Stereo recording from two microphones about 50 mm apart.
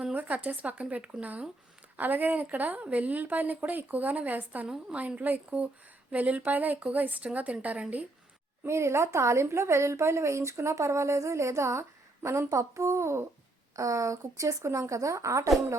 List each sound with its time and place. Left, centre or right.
0.1 s a woman's voice: right
8.6 s speech: right
13.7 s a woman's voice: right